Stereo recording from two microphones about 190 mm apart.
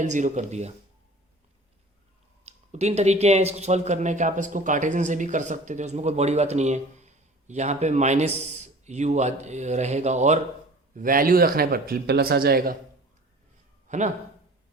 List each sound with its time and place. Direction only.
0.0 s speech: 40° right (ahead or behind)
2.4 s speech: 35° right (ahead or behind); by 12.7 s 55° right (ahead or behind)
13.8 s speech: 40° right (ahead or behind)